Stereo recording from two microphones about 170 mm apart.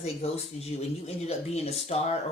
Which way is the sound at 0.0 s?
35° left (ahead or behind).